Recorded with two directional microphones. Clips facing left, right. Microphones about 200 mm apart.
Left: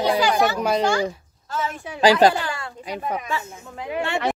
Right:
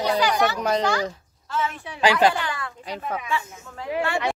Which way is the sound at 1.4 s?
40° left (ahead or behind).